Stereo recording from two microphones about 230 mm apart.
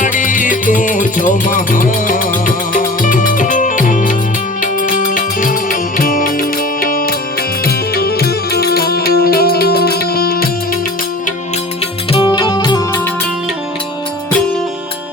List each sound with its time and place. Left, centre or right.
0.0 s music: left
12.1 s music: left